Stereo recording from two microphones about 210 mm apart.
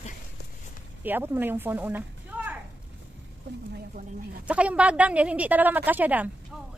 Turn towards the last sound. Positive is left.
turn(degrees=-5)  # may be behind; listen again after turning